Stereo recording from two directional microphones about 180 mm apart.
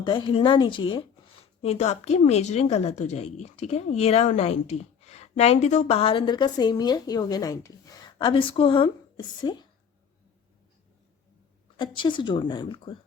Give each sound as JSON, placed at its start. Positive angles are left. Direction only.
{"t": 0.0, "sound": "a woman's voice", "side_deg": 25}
{"t": 11.8, "sound": "a woman's voice", "side_deg": 25}